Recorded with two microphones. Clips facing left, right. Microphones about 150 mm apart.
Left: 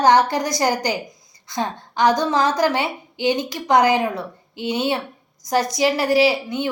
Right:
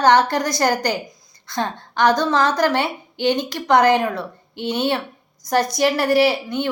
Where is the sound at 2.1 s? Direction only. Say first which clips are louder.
Right 1 dB; 15° left (ahead or behind).